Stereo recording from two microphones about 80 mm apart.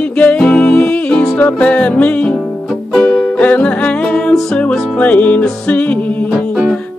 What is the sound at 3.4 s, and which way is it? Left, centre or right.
Music, centre.